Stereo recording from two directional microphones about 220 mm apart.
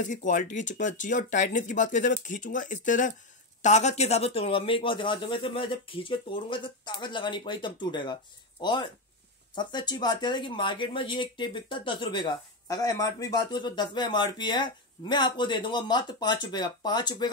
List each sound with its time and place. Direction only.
0.0 s speech: 35° left (ahead or behind); by 17.3 s 20° left (ahead or behind)